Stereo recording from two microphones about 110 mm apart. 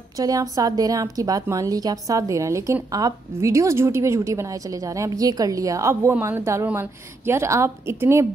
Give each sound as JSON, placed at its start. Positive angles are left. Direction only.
{"t": 0.2, "sound": "a woman's voice", "side_deg": -35}